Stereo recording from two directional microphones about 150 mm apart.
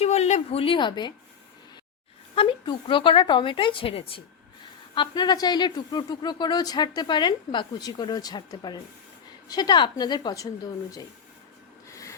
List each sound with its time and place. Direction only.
0.0 s a woman's voice: 45° left (ahead or behind); by 1.1 s 30° left (ahead or behind)
2.3 s a woman's voice: 35° left (ahead or behind)
4.9 s speech: 30° left (ahead or behind)
11.9 s a sound: 20° left (ahead or behind)